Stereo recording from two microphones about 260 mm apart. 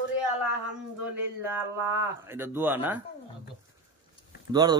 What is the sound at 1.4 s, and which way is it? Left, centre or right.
A woman's voice, centre.